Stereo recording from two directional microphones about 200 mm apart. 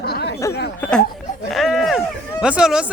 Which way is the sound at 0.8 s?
5° left (ahead or behind).